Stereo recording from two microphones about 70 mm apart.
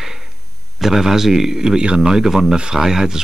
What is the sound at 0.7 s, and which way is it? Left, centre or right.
Speech, centre.